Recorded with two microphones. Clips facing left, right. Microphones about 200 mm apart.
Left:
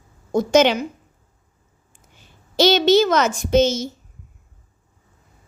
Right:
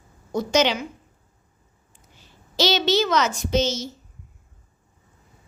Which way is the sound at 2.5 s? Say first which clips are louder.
Left 6 dB; 50° left (ahead or behind).